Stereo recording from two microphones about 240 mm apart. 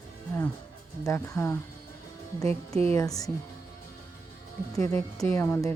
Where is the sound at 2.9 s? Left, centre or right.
Centre.